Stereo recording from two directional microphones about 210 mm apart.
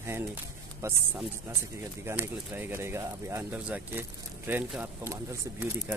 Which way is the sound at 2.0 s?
10° right (ahead or behind).